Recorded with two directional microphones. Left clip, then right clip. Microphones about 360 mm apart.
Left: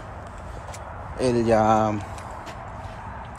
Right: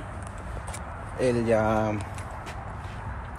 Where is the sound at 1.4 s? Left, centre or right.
Centre.